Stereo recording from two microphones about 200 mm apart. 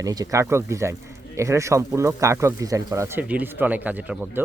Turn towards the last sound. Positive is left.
turn(degrees=-5)  # may be behind; listen again after turning